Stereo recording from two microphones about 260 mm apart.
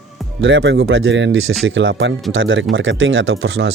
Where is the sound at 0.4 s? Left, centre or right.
Right.